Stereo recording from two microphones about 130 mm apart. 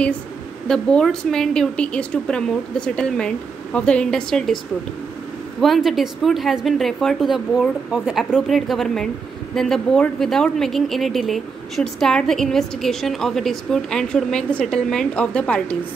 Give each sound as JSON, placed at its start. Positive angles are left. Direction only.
{"t": 0.7, "sound": "a woman's voice", "side_deg": 5}
{"t": 5.6, "sound": "a woman's voice", "side_deg": 0}